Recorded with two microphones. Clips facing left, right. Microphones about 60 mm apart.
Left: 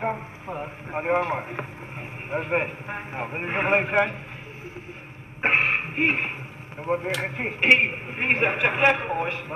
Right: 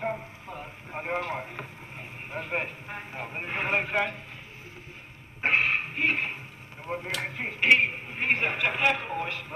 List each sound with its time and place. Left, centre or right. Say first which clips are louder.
0.0 s speech: left 4 dB; left
5.4 s a sound: left 3 dB; left
6.8 s speech: left 7 dB; left